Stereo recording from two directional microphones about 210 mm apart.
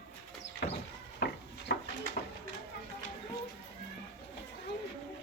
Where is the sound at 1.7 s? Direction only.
50° left (ahead or behind).